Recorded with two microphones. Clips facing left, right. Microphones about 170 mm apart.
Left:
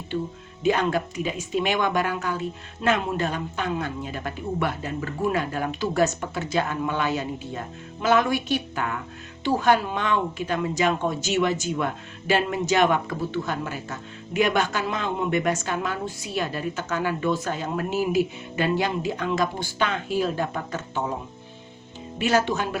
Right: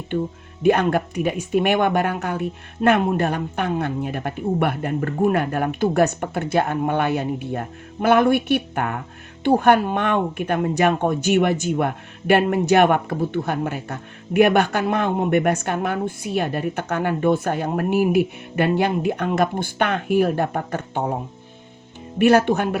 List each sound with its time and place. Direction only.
0.6 s speech: 60° right (ahead or behind)
22.2 s speech: 60° right (ahead or behind)